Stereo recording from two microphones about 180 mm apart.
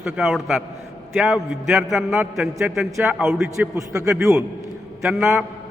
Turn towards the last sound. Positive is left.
turn(degrees=-15)  # may be behind; listen again after turning